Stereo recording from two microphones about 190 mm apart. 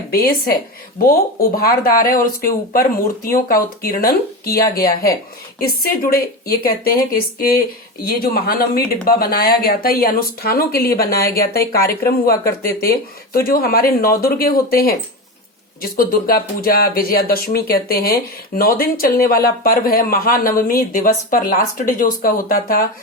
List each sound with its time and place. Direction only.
0.1 s speech: 50° left (ahead or behind)